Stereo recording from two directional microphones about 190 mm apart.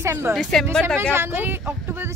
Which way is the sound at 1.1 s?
10° right (ahead or behind).